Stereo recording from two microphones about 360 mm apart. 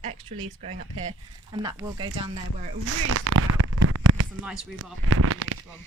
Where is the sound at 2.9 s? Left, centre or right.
Right.